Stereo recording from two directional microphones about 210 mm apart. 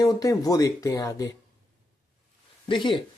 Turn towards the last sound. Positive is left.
turn(degrees=25)  # may be behind; listen again after turning